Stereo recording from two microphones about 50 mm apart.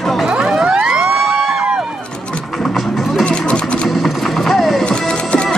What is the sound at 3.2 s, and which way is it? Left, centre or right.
Vehicle, left.